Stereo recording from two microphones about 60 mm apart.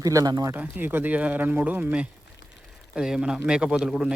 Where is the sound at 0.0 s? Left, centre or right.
Right.